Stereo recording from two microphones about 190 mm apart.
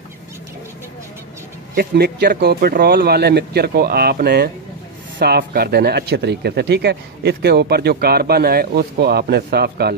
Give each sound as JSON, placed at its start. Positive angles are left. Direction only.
{"t": 1.8, "sound": "speech", "side_deg": -55}